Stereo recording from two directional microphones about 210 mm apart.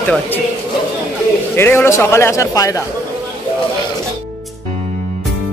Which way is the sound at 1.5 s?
10° left (ahead or behind).